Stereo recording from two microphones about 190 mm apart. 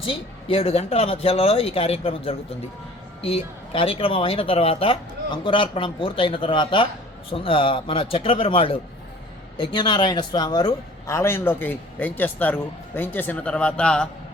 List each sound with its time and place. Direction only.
0.0 s a man's voice: 30° left (ahead or behind); by 14.1 s 5° left (ahead or behind)